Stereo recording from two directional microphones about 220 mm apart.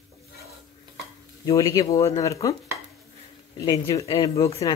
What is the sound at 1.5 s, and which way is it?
Speech, 15° left (ahead or behind).